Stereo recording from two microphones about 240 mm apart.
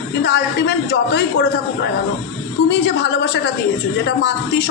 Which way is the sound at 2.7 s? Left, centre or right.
Left.